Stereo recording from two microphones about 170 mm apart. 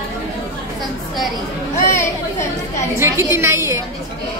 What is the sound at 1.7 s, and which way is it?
Speech, 15° left (ahead or behind).